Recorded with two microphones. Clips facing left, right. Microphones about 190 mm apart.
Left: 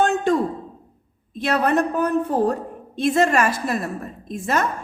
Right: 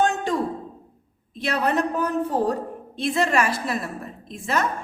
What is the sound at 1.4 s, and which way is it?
A woman's voice, 50° left (ahead or behind).